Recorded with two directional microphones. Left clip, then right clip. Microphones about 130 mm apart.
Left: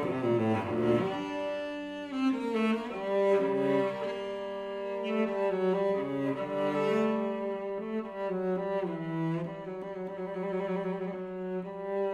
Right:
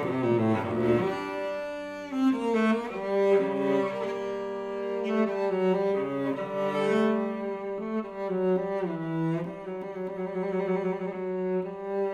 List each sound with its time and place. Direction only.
0.0 s cello: 35° right (ahead or behind)
2.1 s cello: 35° right (ahead or behind)
5.0 s cello: 40° right (ahead or behind)
10.5 s music: 35° right (ahead or behind)
11.5 s cello: 35° right (ahead or behind)